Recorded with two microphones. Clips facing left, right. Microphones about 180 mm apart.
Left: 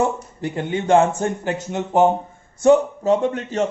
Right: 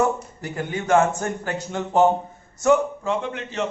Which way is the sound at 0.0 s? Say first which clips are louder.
Left 1 dB; 25° left (ahead or behind).